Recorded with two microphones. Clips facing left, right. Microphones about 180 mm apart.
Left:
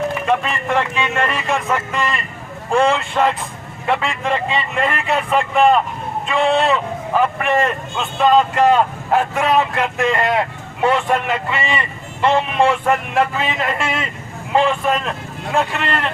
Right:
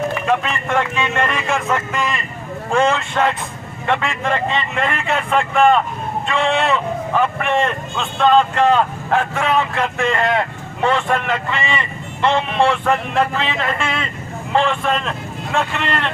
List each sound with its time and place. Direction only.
0.3 s speech: centre (ahead or behind)
6.4 s speech: 35° left (ahead or behind)
6.7 s a man's voice: 5° left (ahead or behind)